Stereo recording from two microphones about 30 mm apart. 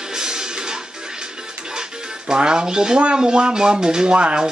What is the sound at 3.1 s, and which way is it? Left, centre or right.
Speech, right.